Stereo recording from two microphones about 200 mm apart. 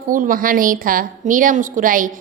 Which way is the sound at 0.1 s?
45° right (ahead or behind).